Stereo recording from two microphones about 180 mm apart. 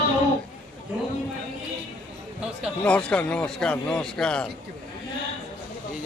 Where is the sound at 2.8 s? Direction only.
5° left (ahead or behind).